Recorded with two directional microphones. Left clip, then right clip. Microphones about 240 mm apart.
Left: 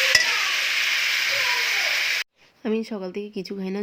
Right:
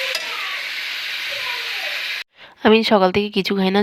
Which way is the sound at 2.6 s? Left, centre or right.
Right.